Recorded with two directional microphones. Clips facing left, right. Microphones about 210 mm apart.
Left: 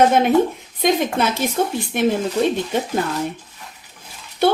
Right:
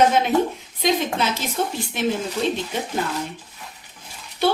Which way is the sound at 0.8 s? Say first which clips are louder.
Left 3 dB; 55° left (ahead or behind).